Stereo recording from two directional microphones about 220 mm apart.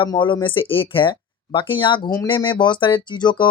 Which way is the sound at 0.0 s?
20° left (ahead or behind).